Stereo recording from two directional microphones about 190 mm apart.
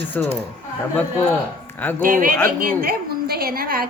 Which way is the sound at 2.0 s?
45° right (ahead or behind).